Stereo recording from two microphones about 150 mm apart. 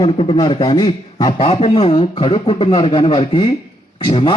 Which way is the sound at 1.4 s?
40° left (ahead or behind).